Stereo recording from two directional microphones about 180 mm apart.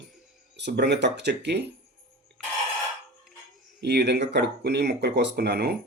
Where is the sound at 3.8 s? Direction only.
70° right (ahead or behind).